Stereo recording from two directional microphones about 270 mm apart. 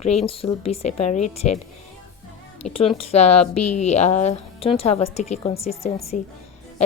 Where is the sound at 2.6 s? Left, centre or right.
Left.